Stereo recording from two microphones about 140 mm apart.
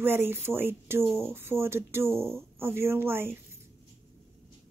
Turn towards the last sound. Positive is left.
turn(degrees=-15)  # may be behind; listen again after turning